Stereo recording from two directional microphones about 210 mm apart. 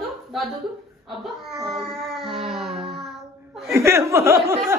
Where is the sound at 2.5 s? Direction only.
Centre (ahead or behind).